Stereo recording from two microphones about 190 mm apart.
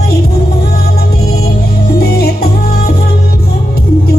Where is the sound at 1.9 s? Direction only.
55° left (ahead or behind).